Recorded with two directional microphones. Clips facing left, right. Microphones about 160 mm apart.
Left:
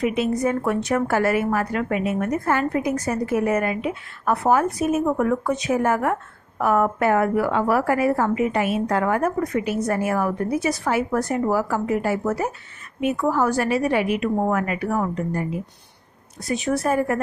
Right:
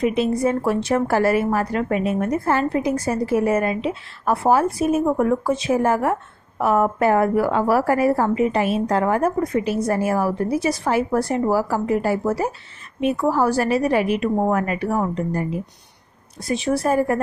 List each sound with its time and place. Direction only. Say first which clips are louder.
0.0 s a woman's voice: right 2 dB; 35° right (ahead or behind)
16.4 s a woman's voice: right 2 dB; 30° right (ahead or behind)